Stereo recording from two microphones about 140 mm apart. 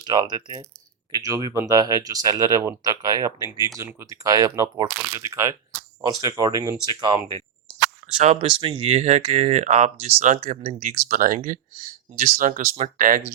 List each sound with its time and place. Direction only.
0.0 s speech: 30° right (ahead or behind)
8.0 s speech: 55° right (ahead or behind)
10.8 s speech: 80° right
12.1 s speech: 70° right (ahead or behind)